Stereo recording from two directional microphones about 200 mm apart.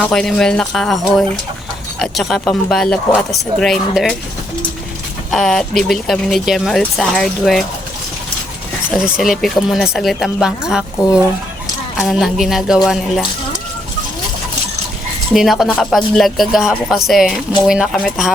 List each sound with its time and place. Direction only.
0.0 s speech: 5° left (ahead or behind)
5.3 s speech: centre (ahead or behind)
8.9 s speech: 5° right (ahead or behind)
15.3 s speech: centre (ahead or behind)